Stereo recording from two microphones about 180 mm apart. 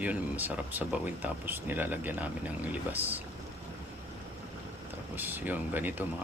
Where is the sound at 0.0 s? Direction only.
10° right (ahead or behind).